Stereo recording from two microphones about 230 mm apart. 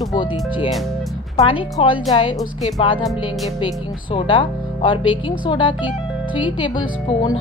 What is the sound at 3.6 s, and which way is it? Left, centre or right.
Speech, left.